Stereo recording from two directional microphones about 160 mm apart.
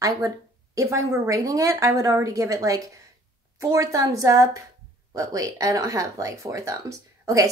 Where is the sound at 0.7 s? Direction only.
20° right (ahead or behind).